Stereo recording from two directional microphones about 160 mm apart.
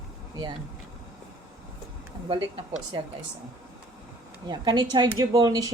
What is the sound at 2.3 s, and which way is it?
Speech, 35° right (ahead or behind).